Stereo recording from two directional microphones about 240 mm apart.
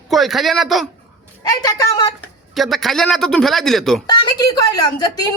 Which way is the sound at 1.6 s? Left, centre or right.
Centre.